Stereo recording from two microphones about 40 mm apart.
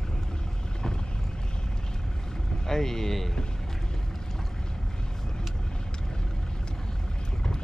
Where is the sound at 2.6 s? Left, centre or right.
Centre.